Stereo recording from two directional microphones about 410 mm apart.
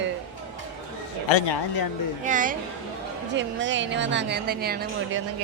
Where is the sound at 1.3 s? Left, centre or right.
Left.